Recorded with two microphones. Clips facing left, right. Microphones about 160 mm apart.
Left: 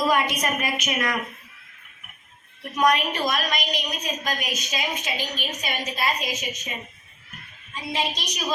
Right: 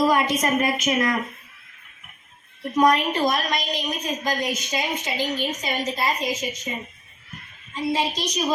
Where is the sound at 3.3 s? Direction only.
25° right (ahead or behind).